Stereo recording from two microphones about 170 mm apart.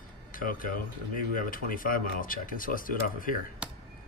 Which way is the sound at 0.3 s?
55° left (ahead or behind).